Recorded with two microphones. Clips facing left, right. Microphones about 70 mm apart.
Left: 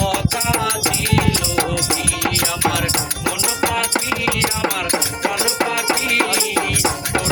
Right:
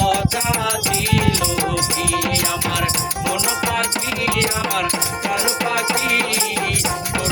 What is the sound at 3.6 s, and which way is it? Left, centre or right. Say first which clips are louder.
Music: left 2 dB; left.